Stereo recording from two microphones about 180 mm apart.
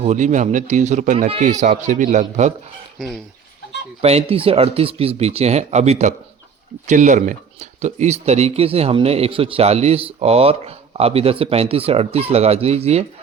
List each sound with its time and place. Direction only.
0.0 s speech: 40° right (ahead or behind)
4.0 s speech: 35° right (ahead or behind)